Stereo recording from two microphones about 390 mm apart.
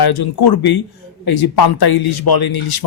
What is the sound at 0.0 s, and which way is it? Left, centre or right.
Speech, left.